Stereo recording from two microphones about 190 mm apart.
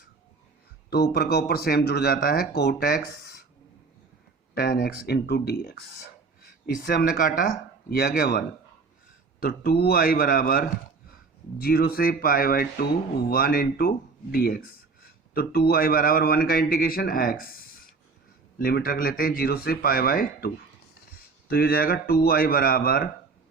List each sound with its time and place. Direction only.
0.9 s speech: 55° left (ahead or behind)
4.5 s speech: 50° left (ahead or behind)
6.4 s speech: 45° left (ahead or behind)
18.6 s speech: 50° left (ahead or behind)